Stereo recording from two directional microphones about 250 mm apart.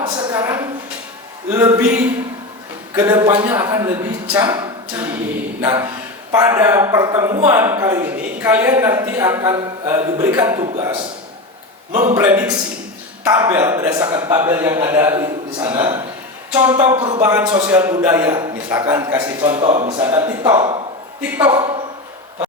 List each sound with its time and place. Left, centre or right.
0.0 s a sound: centre
1.5 s speech: centre
11.9 s a man's voice: right
12.1 s speech: centre
16.5 s a sound: centre
16.7 s speech: centre
19.6 s speech: right
21.2 s speech: centre